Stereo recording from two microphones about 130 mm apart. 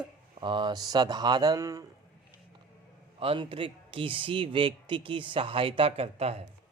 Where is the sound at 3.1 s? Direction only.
45° right (ahead or behind).